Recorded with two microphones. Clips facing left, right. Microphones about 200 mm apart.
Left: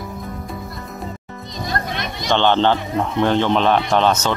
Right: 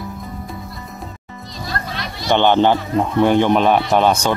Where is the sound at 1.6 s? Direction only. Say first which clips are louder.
Left 2 dB; 20° left (ahead or behind).